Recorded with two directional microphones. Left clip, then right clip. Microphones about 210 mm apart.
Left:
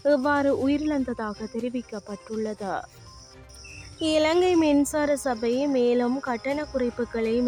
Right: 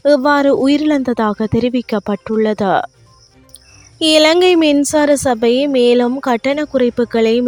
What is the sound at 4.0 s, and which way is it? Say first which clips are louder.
Speech: right 12 dB; 45° right (ahead or behind).